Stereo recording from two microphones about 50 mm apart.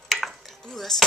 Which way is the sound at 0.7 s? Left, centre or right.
Centre.